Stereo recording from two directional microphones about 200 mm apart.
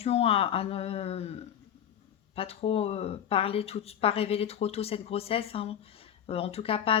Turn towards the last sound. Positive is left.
turn(degrees=30)  # may be behind; listen again after turning